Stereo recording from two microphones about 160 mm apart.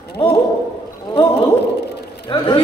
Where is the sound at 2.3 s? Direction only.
30° left (ahead or behind).